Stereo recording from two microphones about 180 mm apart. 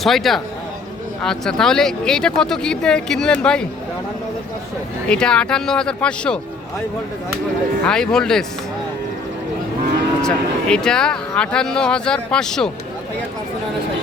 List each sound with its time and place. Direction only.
0.0 s speech: centre (ahead or behind)
5.0 s speech: 5° left (ahead or behind)
7.9 s speech: 5° left (ahead or behind)
10.2 s speech: 5° left (ahead or behind)